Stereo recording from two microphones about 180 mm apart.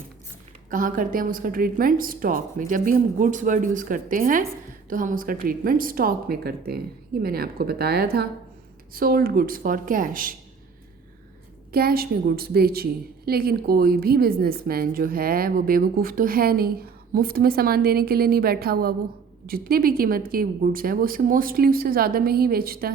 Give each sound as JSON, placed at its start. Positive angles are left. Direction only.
{"t": 0.7, "sound": "a woman's voice", "side_deg": -50}
{"t": 11.7, "sound": "a woman's voice", "side_deg": -55}